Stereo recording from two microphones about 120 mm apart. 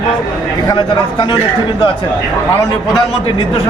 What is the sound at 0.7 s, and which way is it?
Speech, 40° left (ahead or behind).